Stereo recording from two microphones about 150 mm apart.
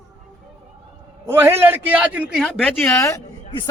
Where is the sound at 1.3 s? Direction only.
15° right (ahead or behind).